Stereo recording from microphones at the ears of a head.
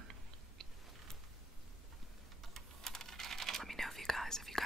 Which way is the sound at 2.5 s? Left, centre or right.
Right.